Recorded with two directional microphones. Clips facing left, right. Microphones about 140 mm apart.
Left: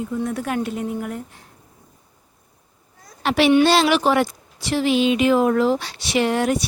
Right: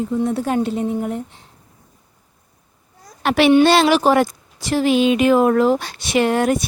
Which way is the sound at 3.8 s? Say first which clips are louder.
Right 3 dB; 40° right (ahead or behind).